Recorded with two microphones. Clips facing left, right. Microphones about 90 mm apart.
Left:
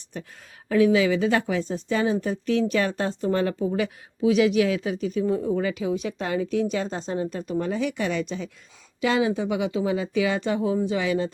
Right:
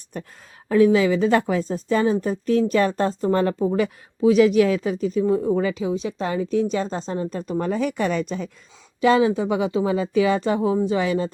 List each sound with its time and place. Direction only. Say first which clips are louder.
0.7 s speech: right 3 dB; 35° right (ahead or behind)